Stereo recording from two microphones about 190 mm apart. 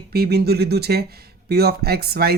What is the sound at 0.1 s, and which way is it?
Speech, 55° right (ahead or behind).